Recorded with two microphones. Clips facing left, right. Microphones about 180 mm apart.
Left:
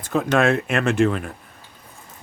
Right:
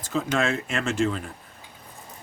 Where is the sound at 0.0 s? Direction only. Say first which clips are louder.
Left 6 dB; 60° left (ahead or behind).